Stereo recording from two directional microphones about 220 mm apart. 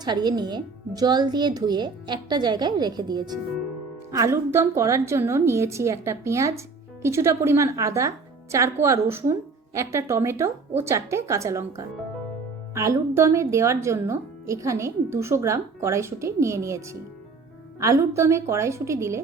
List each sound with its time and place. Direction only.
0.0 s speech: 20° right (ahead or behind)